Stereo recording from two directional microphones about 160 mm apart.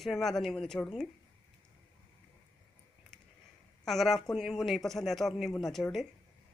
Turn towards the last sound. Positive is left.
turn(degrees=0)  # may be behind; listen again after turning